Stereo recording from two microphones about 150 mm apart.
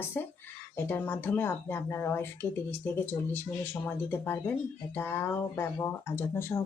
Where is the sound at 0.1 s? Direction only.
10° left (ahead or behind).